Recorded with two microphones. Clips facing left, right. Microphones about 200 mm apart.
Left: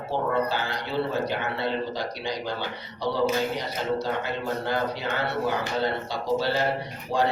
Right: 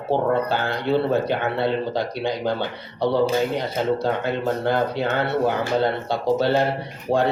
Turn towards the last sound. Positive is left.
turn(degrees=-60)  # may be behind; listen again after turning